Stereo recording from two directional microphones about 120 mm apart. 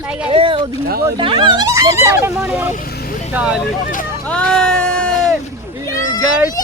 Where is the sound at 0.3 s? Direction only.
50° right (ahead or behind).